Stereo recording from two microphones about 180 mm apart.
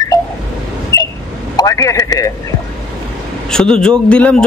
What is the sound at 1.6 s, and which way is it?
Speech, 20° left (ahead or behind).